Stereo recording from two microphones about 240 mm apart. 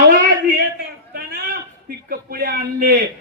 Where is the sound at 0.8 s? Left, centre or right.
Right.